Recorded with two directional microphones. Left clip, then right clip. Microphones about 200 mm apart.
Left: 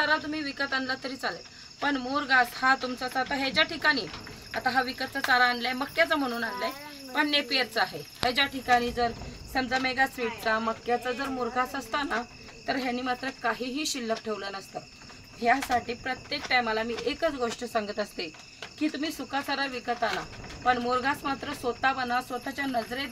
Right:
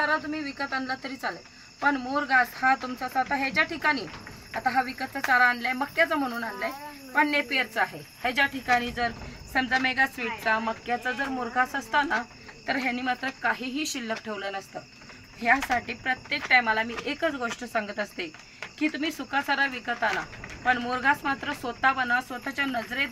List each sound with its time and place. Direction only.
0.0 s speech: 10° left (ahead or behind)